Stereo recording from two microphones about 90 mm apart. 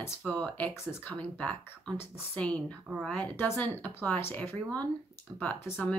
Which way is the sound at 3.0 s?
10° left (ahead or behind).